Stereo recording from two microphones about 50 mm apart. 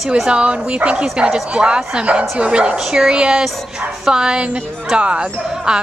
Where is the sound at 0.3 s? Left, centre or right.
Right.